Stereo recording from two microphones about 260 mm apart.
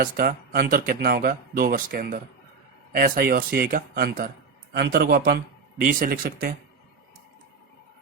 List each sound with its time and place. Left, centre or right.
0.0 s speech: right